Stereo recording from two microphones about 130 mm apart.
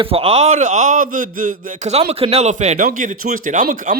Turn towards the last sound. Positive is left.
turn(degrees=-80)